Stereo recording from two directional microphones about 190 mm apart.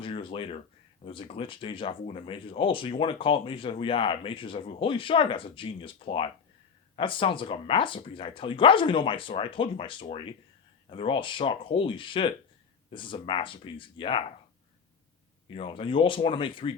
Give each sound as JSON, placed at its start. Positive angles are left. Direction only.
{"t": 0.0, "sound": "a sound", "side_deg": 25}
{"t": 1.0, "sound": "speech", "side_deg": 25}
{"t": 15.4, "sound": "speech", "side_deg": 25}